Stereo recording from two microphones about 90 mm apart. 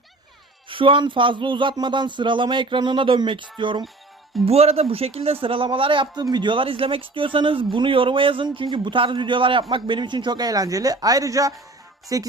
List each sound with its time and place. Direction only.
0.7 s speech: 75° right (ahead or behind)
4.4 s a man's voice: 90° right; by 12.3 s 40° right (ahead or behind)